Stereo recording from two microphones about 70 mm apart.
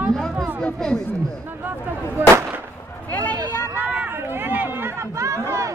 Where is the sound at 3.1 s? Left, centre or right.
Left.